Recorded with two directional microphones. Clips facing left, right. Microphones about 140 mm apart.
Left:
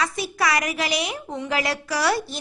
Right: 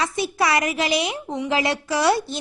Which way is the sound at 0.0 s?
25° right (ahead or behind).